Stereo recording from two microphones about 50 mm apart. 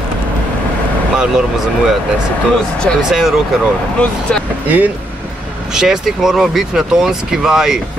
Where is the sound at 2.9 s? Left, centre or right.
Centre.